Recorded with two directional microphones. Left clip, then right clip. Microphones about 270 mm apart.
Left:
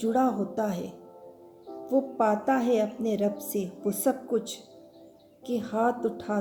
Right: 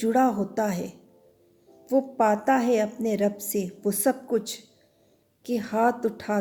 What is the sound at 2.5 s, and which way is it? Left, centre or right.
A woman's voice, right.